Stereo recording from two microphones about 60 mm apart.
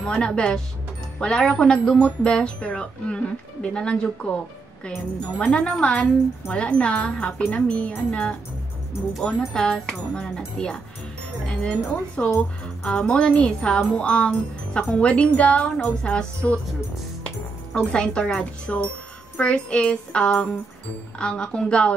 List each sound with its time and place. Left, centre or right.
0.0 s speech: centre
17.9 s speech: centre